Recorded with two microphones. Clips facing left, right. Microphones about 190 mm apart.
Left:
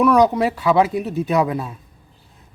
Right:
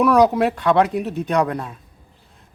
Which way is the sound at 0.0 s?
Centre (ahead or behind).